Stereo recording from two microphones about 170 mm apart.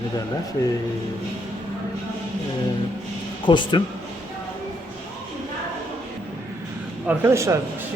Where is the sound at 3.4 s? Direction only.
30° left (ahead or behind).